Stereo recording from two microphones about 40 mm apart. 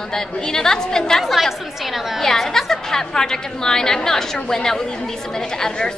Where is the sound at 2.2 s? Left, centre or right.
Centre.